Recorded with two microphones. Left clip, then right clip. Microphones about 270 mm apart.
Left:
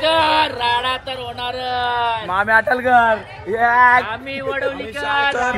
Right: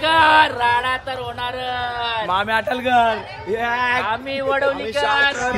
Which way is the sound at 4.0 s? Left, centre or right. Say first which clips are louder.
Right 3 dB; right.